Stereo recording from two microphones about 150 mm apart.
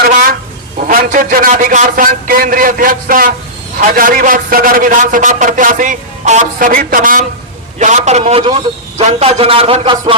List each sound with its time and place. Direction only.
0.8 s a man's voice: 65° right (ahead or behind)
7.8 s a man's voice: 50° right (ahead or behind); by 10.0 s 35° right (ahead or behind)